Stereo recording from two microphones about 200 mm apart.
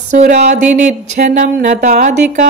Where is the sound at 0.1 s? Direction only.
35° right (ahead or behind).